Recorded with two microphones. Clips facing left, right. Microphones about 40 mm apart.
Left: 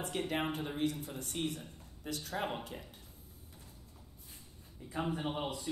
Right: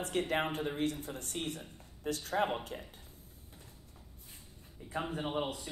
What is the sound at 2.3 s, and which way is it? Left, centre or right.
Speech, centre.